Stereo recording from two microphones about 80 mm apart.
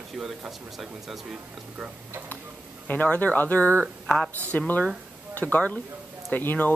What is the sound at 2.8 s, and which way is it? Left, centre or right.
Speech, centre.